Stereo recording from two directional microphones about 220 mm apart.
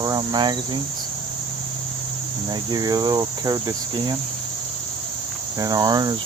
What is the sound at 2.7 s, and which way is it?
Cricket, 20° right (ahead or behind).